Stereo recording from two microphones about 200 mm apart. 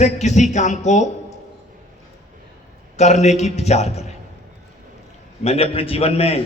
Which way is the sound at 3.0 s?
35° left (ahead or behind).